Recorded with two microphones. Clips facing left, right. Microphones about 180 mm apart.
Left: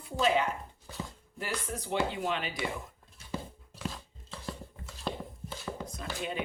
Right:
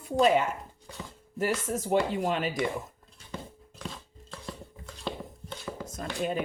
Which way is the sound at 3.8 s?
Centre (ahead or behind).